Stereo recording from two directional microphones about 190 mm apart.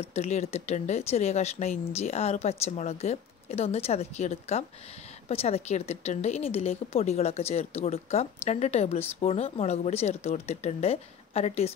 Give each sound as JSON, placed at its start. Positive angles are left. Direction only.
{"t": 0.0, "sound": "a woman's voice", "side_deg": 35}